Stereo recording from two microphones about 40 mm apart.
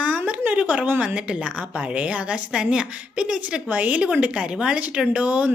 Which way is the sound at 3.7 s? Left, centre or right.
Right.